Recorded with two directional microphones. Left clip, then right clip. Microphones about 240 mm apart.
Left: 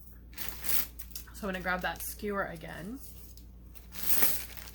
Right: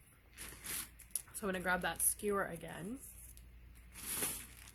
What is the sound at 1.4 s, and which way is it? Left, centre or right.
A woman's voice, right.